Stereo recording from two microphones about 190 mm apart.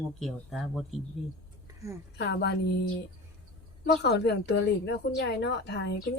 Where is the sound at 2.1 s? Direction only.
65° left (ahead or behind).